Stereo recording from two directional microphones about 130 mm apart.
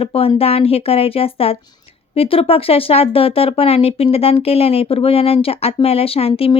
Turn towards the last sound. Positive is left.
turn(degrees=45)  # may be behind; listen again after turning